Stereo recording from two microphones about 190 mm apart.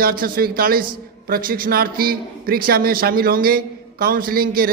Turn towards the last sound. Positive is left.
turn(degrees=-50)  # may be behind; listen again after turning